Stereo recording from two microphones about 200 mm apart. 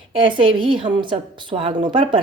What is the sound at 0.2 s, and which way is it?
Speech, 25° right (ahead or behind).